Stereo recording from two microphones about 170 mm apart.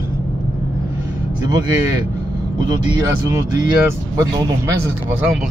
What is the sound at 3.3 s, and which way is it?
Speech, 20° right (ahead or behind).